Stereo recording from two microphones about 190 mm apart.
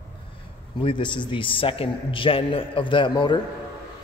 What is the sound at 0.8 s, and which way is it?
A man's voice, 25° left (ahead or behind).